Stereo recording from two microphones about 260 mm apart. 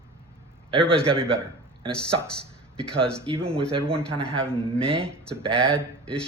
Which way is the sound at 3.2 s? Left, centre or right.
Right.